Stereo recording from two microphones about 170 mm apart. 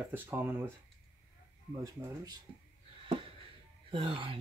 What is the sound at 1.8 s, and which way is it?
Speech, 20° right (ahead or behind).